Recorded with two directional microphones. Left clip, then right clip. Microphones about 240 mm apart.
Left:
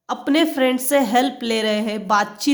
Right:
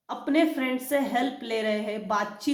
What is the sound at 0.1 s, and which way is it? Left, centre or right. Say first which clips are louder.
A woman's voice: left 6 dB; left.